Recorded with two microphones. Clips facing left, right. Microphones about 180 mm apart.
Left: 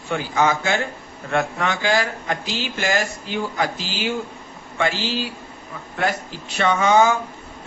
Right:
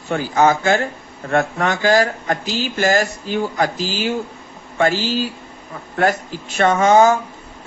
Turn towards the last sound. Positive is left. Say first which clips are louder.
# right 4 dB
turn(degrees=-40)  # may be behind; listen again after turning